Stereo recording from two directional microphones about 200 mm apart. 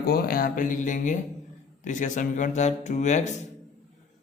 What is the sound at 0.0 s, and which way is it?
Speech, 50° left (ahead or behind).